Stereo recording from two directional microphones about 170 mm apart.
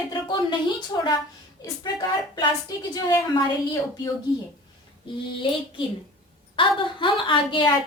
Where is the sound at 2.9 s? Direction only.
20° left (ahead or behind).